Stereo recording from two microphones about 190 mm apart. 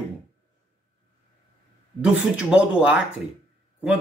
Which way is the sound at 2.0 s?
5° right (ahead or behind).